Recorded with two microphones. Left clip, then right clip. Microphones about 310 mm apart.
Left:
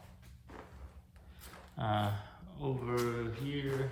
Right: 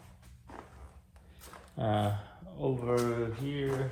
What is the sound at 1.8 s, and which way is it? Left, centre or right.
Speech, centre.